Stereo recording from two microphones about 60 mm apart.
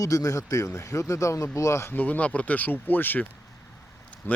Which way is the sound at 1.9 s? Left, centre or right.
Left.